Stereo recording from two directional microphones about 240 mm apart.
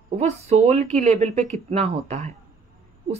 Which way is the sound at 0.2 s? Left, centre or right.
Right.